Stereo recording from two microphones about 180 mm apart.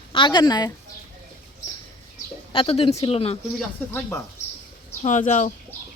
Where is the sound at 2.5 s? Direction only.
30° left (ahead or behind).